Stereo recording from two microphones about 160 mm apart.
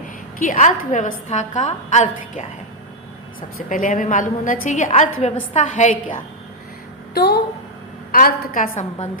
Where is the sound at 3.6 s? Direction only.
55° left (ahead or behind).